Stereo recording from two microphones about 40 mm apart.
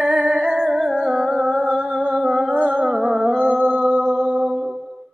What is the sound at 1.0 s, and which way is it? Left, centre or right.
Music, centre.